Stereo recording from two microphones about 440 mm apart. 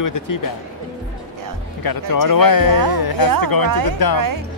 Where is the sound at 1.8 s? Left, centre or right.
Left.